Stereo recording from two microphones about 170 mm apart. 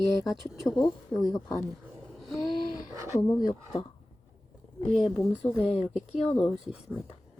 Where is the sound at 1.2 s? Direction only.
20° left (ahead or behind).